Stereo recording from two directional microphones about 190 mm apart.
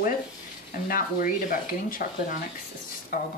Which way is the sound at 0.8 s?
45° left (ahead or behind).